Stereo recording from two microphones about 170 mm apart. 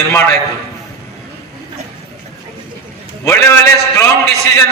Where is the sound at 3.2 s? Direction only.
15° left (ahead or behind).